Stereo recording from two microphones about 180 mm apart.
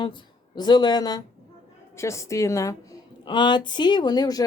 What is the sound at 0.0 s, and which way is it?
Speech, 25° left (ahead or behind).